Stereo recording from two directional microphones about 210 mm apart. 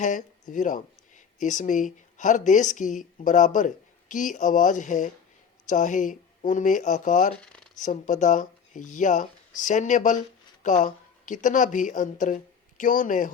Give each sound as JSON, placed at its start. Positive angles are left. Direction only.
{"t": 0.0, "sound": "speech", "side_deg": 35}
{"t": 7.3, "sound": "a sound", "side_deg": 5}
{"t": 7.8, "sound": "a woman's voice", "side_deg": 35}